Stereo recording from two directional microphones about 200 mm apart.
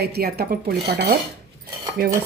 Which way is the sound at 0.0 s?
50° right (ahead or behind).